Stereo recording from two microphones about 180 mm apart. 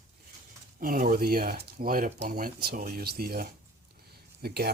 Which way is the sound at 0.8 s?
50° right (ahead or behind).